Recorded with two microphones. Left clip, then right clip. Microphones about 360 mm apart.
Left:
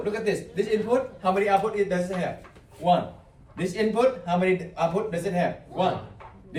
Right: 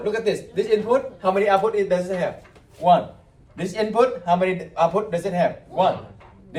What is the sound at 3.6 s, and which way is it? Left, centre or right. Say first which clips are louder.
A man's voice: right 3 dB; centre.